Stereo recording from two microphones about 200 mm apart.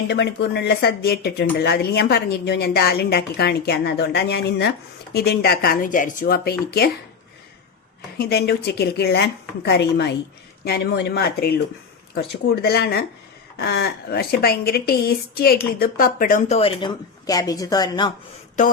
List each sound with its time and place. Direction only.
0.1 s a woman's voice: 60° left (ahead or behind)
8.2 s a woman's voice: 55° left (ahead or behind)
12.6 s a woman's voice: 50° left (ahead or behind); by 18.1 s 20° left (ahead or behind)